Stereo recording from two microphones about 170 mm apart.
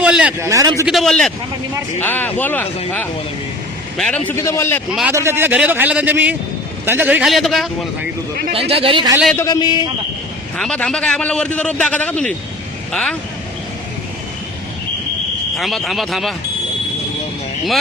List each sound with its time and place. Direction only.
0.0 s a man's voice: 5° right (ahead or behind)
0.5 s a man's voice: 20° right (ahead or behind)
0.9 s a man's voice: centre (ahead or behind)
4.4 s a man's voice: 15° left (ahead or behind)
4.9 s a man's voice: 5° right (ahead or behind)
8.5 s speech: 35° right (ahead or behind)
9.3 s a man's voice: 20° left (ahead or behind)
10.6 s a man's voice: 5° left (ahead or behind)
15.5 s a man's voice: centre (ahead or behind)